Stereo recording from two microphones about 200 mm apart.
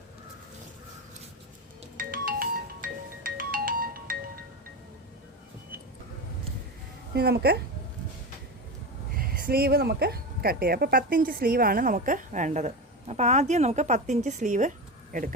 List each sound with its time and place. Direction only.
2.0 s music: 45° right (ahead or behind)
7.1 s speech: 55° right (ahead or behind)
9.1 s speech: 50° right (ahead or behind)